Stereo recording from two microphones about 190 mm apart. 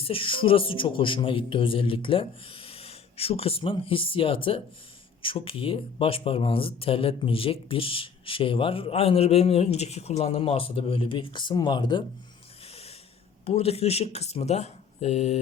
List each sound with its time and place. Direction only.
0.0 s speech: 30° left (ahead or behind)
12.6 s snort: 30° left (ahead or behind)
13.4 s speech: 30° left (ahead or behind)